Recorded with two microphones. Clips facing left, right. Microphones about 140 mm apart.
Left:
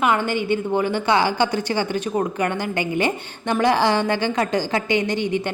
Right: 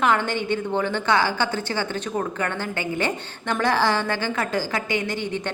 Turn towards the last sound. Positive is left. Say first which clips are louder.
# left 5 dB
turn(degrees=20)  # may be behind; listen again after turning